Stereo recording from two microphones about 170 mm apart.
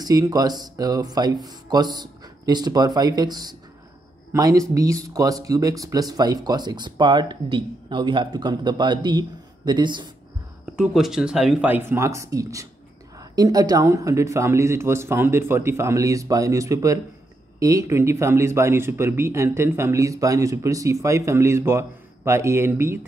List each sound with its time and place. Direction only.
0.0 s speech: 20° right (ahead or behind)
10.6 s speech: 5° right (ahead or behind)